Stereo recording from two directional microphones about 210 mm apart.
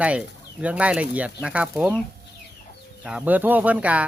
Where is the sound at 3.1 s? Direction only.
5° right (ahead or behind).